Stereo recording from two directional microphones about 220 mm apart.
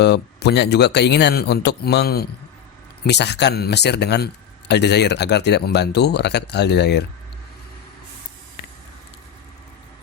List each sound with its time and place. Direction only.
0.0 s speech: 50° left (ahead or behind)